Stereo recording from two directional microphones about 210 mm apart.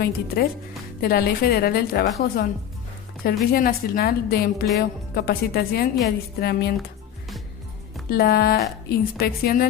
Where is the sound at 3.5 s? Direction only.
45° left (ahead or behind).